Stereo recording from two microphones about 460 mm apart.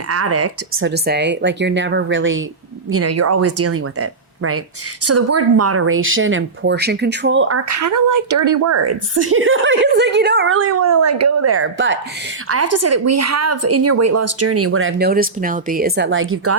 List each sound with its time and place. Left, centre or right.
0.1 s a woman's voice: right